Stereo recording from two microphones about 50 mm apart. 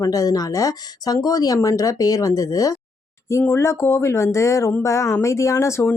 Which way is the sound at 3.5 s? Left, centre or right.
Left.